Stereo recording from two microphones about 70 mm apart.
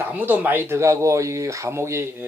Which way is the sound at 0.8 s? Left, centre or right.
Right.